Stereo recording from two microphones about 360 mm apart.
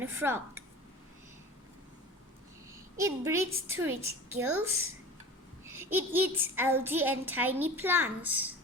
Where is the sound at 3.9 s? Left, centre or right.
Right.